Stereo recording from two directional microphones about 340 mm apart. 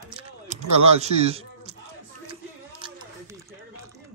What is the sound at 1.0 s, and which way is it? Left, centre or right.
Speech, centre.